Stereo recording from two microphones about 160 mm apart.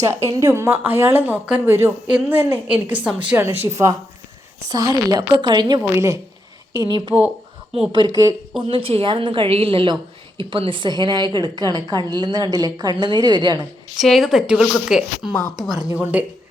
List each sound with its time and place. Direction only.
0.0 s a woman's voice: 20° right (ahead or behind)
14.0 s a woman's voice: centre (ahead or behind)